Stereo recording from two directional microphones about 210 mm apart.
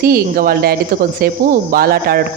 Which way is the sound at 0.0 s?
45° right (ahead or behind).